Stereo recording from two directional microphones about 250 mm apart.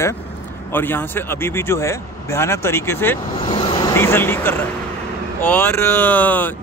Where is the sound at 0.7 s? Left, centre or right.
Centre.